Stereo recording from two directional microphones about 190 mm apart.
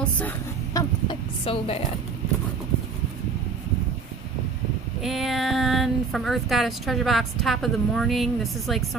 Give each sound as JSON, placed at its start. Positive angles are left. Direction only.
{"t": 0.7, "sound": "chicken", "side_deg": 25}
{"t": 5.0, "sound": "speech", "side_deg": 0}